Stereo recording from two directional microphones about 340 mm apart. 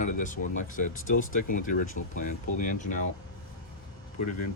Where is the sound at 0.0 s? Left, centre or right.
Left.